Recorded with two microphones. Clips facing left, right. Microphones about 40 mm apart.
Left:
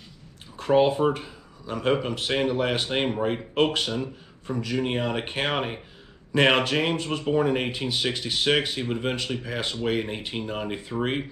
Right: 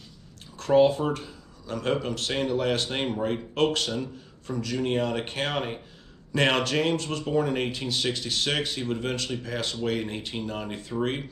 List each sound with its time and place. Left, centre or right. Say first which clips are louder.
0.6 s speech: even; centre